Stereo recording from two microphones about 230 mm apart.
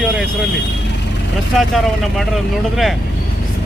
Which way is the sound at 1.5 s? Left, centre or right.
Centre.